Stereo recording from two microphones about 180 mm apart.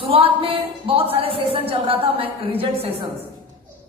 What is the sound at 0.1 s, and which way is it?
A man's voice, 30° right (ahead or behind).